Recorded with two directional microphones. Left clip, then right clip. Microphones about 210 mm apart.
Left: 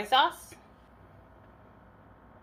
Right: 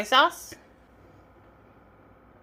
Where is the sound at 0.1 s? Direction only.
50° right (ahead or behind).